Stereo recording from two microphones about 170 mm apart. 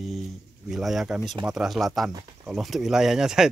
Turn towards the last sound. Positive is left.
turn(degrees=-5)  # may be behind; listen again after turning